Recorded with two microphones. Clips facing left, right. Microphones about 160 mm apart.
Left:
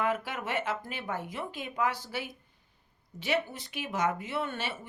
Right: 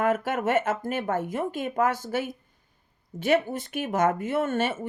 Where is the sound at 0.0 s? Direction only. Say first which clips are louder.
Right 7 dB; 50° right (ahead or behind).